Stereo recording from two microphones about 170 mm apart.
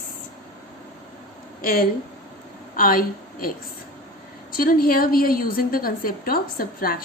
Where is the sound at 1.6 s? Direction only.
60° left (ahead or behind).